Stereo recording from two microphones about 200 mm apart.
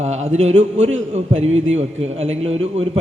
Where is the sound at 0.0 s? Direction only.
35° right (ahead or behind).